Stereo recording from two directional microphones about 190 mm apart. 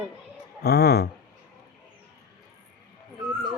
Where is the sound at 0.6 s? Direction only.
55° left (ahead or behind).